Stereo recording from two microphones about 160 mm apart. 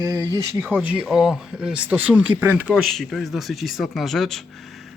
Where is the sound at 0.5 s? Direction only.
10° right (ahead or behind).